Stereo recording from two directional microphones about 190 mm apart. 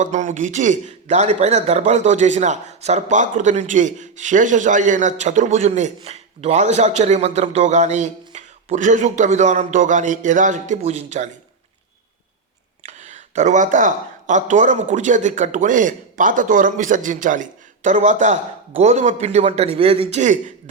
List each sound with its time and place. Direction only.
0.0 s a man's voice: 40° right (ahead or behind)
12.8 s a man's voice: 35° right (ahead or behind)